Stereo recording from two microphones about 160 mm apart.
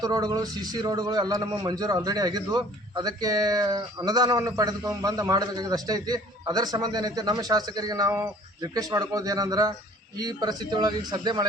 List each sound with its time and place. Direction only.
0.0 s speech: 25° right (ahead or behind)